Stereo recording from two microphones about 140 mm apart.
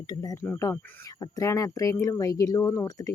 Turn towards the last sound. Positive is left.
turn(degrees=20)  # may be behind; listen again after turning